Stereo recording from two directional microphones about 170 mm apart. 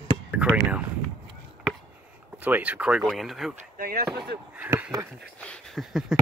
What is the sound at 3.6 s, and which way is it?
Speech, 60° right (ahead or behind).